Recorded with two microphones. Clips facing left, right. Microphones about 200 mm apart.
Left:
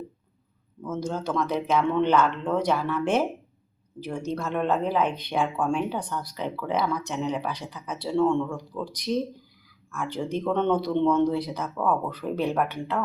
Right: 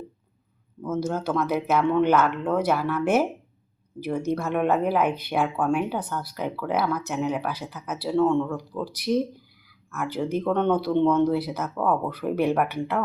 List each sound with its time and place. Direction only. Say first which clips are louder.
0.9 s speech: right 3 dB; 5° right (ahead or behind)